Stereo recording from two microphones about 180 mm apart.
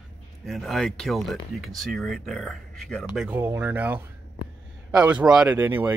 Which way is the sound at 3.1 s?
10° right (ahead or behind).